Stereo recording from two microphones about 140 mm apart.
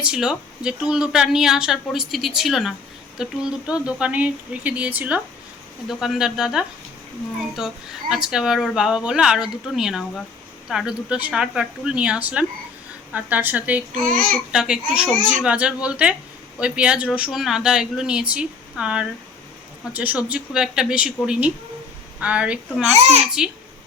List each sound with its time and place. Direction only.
0.0 s speech: 5° right (ahead or behind)
14.0 s a child's voice: 90° right
14.5 s speech: 5° right (ahead or behind)
22.9 s a child's voice: 50° right (ahead or behind)